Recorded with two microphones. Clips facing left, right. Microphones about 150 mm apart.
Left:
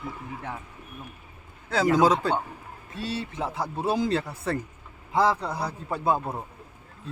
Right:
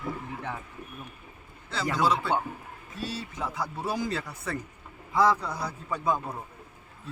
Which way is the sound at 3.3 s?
30° left (ahead or behind).